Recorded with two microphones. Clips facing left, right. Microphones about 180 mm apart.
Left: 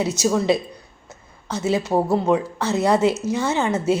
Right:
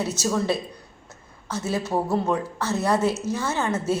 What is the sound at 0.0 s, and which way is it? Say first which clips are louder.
Speech: left 4 dB; 15° left (ahead or behind).